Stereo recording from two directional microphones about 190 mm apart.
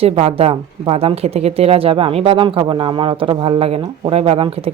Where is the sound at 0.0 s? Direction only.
30° right (ahead or behind).